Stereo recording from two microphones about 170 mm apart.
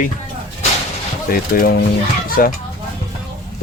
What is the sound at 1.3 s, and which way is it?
Speech, 60° left (ahead or behind).